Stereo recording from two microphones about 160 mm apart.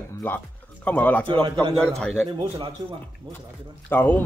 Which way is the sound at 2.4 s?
35° right (ahead or behind).